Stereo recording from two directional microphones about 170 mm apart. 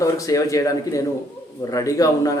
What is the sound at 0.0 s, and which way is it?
Speech, 20° left (ahead or behind).